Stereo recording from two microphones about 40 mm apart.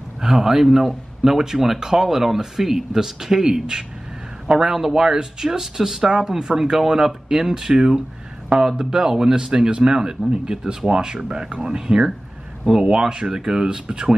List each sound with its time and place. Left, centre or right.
0.2 s speech: centre